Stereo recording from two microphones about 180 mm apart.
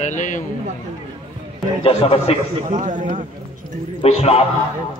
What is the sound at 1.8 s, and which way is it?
Speech, 35° left (ahead or behind).